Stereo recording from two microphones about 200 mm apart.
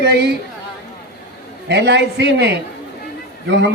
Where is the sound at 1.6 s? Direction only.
60° right (ahead or behind).